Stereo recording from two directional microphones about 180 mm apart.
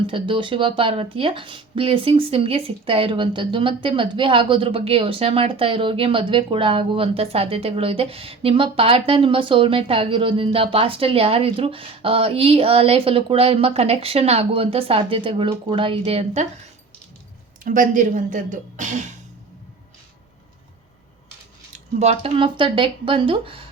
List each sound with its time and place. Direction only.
0.1 s speech: 30° right (ahead or behind)
17.6 s speech: 45° right (ahead or behind)
21.9 s speech: 35° right (ahead or behind)